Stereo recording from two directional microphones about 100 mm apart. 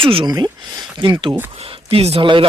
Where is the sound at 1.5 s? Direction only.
70° right (ahead or behind).